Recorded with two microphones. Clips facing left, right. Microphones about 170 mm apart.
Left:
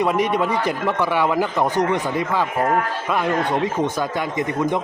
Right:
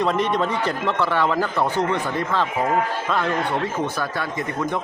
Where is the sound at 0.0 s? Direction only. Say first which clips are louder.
Left 2 dB; 10° left (ahead or behind).